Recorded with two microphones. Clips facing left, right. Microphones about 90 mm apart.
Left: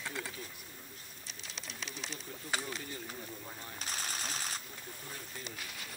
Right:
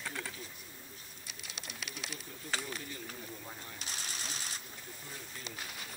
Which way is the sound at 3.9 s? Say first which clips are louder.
Left 4 dB; 45° left (ahead or behind).